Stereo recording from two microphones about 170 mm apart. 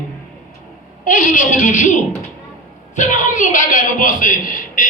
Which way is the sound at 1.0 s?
50° left (ahead or behind).